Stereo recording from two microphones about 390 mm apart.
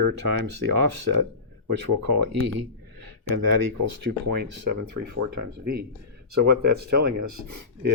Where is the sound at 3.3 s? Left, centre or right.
Right.